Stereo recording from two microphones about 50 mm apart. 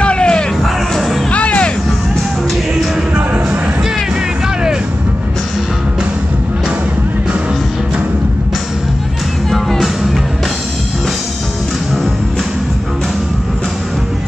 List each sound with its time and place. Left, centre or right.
0.0 s music: left
0.9 s music: centre
1.3 s music: left
9.5 s music: centre